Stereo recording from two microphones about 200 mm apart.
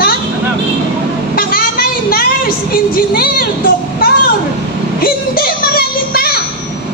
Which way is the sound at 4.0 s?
50° left (ahead or behind).